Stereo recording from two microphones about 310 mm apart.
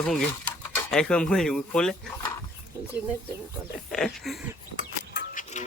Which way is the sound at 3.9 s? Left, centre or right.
Centre.